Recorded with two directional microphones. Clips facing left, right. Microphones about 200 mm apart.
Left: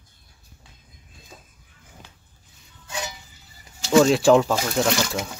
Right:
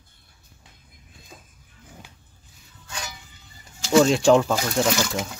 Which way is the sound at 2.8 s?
20° left (ahead or behind).